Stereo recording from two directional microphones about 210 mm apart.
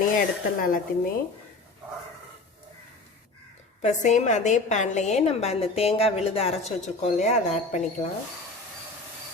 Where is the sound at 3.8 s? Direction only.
35° left (ahead or behind).